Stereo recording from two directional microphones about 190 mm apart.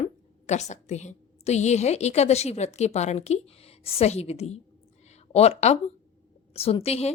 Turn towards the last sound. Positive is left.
turn(degrees=35)  # may be behind; listen again after turning